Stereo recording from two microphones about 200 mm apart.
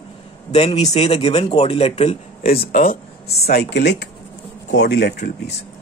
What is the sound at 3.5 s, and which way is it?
Speech, 55° left (ahead or behind).